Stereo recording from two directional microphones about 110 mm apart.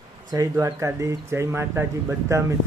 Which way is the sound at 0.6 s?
30° right (ahead or behind).